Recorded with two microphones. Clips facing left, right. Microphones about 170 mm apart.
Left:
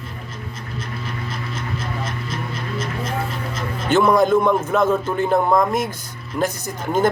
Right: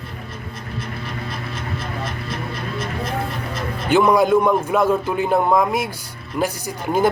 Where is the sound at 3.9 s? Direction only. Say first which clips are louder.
Even; 10° right (ahead or behind).